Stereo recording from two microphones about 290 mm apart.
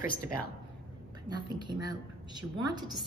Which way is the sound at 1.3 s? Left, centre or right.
Centre.